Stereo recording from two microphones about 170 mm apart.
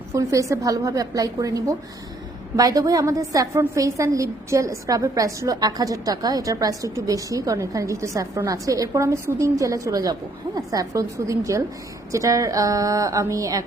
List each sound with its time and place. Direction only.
0.1 s a woman's voice: 20° right (ahead or behind)